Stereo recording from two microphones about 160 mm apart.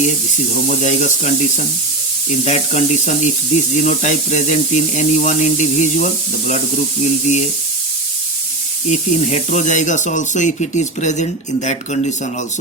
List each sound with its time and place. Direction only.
0.7 s speech: 45° left (ahead or behind)
8.9 s speech: 45° left (ahead or behind)